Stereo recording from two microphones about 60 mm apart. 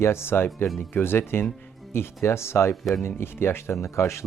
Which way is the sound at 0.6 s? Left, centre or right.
Centre.